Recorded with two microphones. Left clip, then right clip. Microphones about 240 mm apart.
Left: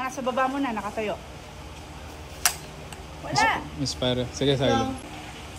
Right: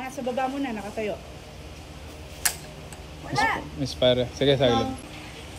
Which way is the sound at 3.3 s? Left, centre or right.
Centre.